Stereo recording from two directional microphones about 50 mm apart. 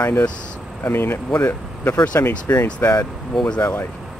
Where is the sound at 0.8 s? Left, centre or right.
Left.